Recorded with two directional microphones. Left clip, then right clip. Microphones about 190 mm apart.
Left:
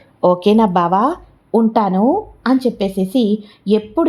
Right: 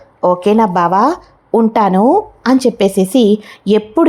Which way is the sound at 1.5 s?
20° right (ahead or behind).